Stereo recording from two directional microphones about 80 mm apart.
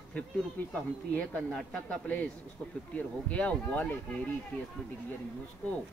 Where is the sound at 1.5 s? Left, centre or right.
Centre.